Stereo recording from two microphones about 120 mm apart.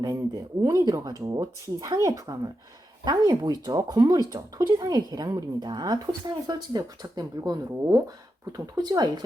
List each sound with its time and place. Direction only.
0.0 s a woman's voice: 30° right (ahead or behind)